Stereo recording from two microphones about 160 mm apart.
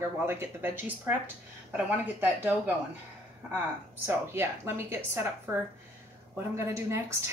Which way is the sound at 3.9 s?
15° right (ahead or behind).